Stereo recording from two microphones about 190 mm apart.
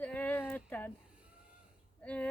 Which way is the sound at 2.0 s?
5° left (ahead or behind).